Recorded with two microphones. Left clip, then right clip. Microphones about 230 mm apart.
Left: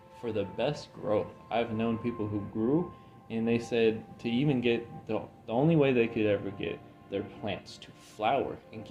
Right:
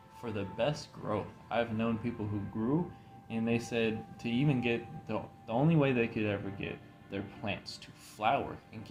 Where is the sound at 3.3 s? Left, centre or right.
Right.